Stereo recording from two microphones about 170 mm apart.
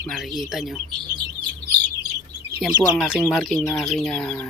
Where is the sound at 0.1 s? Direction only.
Centre (ahead or behind).